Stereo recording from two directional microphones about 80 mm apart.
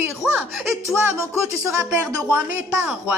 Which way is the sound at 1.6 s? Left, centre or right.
Right.